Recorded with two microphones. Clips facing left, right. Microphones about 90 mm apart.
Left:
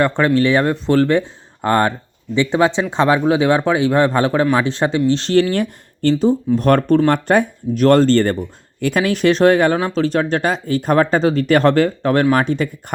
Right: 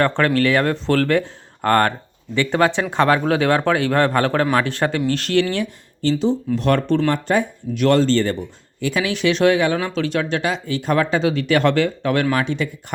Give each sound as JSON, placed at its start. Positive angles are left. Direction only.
{"t": 0.2, "sound": "speech", "side_deg": 20}
{"t": 5.4, "sound": "speech", "side_deg": 45}